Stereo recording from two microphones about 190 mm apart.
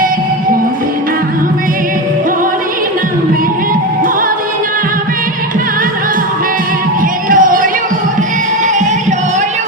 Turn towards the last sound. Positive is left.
turn(degrees=-45)  # may be behind; listen again after turning